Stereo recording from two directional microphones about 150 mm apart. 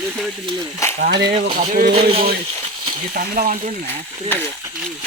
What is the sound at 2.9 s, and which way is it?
Speech, 70° right (ahead or behind).